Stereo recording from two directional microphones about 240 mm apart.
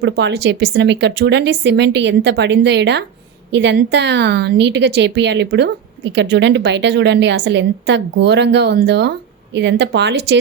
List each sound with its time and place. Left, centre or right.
0.0 s a woman's voice: right